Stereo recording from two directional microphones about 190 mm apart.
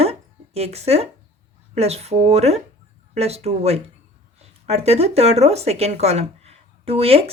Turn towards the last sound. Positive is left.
turn(degrees=-30)  # may be behind; listen again after turning